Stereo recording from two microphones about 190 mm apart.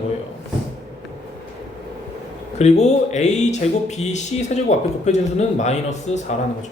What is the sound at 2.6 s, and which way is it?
Speech, 35° left (ahead or behind).